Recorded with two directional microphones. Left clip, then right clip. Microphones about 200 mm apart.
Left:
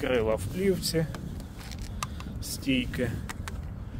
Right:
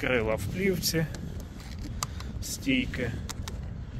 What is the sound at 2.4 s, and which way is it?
Speech, 20° left (ahead or behind).